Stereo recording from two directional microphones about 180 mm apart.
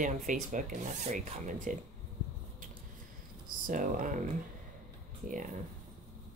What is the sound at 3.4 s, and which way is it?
Speech, 50° right (ahead or behind).